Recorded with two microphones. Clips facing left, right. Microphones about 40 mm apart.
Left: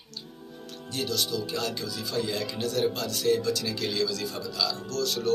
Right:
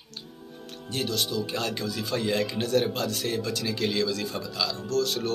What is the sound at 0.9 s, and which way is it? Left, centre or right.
A man's voice, right.